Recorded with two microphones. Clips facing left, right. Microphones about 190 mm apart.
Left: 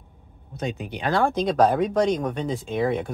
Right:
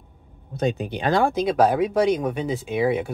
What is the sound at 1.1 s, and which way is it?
Speech, 5° right (ahead or behind).